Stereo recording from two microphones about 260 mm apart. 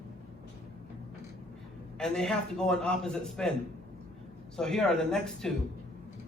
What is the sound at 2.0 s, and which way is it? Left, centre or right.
A man's voice, centre.